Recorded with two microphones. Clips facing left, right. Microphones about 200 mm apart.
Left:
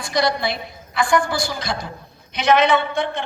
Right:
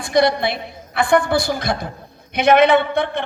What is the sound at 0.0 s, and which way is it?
A woman's voice, 55° right (ahead or behind).